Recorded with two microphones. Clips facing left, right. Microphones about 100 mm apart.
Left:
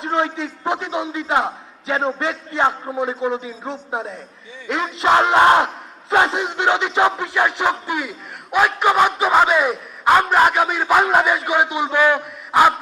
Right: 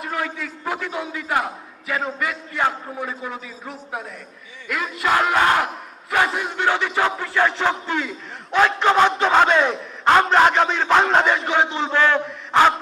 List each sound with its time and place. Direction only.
0.0 s a man's voice: 25° left (ahead or behind)
4.7 s battle cry: 25° left (ahead or behind)